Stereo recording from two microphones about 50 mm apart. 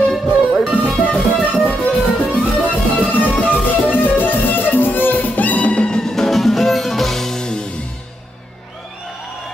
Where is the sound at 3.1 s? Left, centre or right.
Left; by 7.6 s centre.